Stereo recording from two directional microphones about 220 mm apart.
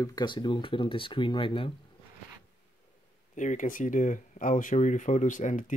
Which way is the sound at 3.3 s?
35° left (ahead or behind).